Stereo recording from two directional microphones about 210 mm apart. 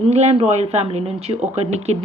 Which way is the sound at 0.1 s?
30° right (ahead or behind).